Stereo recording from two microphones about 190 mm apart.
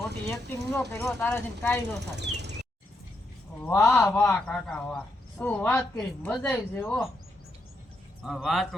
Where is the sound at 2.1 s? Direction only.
65° right (ahead or behind).